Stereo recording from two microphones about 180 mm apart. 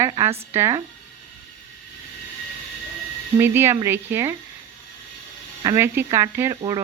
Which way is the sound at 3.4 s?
10° right (ahead or behind).